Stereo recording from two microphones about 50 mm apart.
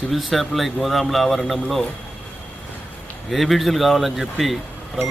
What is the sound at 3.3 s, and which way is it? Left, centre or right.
Speech, centre.